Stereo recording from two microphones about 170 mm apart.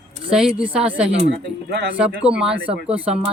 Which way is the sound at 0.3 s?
5° right (ahead or behind).